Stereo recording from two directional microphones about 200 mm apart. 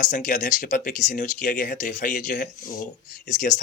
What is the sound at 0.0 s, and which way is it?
Speech, 40° left (ahead or behind).